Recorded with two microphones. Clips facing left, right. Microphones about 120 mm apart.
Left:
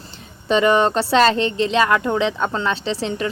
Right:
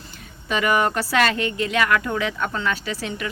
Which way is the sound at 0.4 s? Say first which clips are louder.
Left 5 dB; 30° left (ahead or behind).